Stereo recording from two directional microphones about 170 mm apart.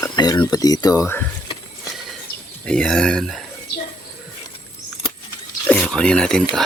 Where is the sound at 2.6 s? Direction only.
5° left (ahead or behind).